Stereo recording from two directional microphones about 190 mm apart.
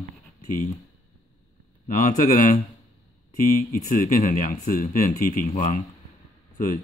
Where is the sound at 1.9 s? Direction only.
40° left (ahead or behind).